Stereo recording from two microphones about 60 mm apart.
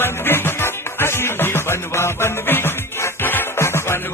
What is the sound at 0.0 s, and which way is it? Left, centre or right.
Music, left.